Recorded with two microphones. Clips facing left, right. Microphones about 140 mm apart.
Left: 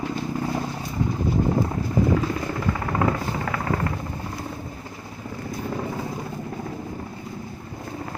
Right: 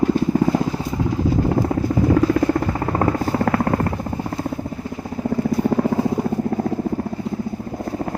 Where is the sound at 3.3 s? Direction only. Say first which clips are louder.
Right 9 dB; 50° right (ahead or behind).